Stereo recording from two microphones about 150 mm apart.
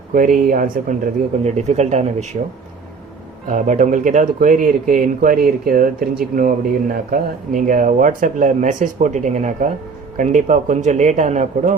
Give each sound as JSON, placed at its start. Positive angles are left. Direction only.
{"t": 0.1, "sound": "speech", "side_deg": -65}
{"t": 1.5, "sound": "speech", "side_deg": -45}
{"t": 3.4, "sound": "speech", "side_deg": -55}